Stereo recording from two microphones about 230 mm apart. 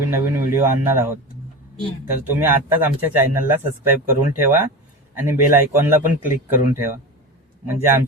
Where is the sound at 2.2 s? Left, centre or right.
Centre.